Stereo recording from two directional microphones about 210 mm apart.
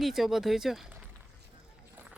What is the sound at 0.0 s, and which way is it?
Speech, centre (ahead or behind).